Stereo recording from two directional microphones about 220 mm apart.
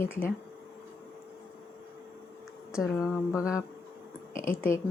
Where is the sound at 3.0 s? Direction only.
Centre (ahead or behind).